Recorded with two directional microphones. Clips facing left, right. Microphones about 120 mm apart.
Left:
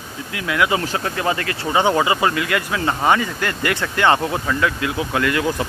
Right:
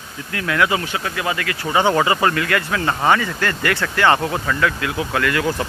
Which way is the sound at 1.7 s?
15° left (ahead or behind).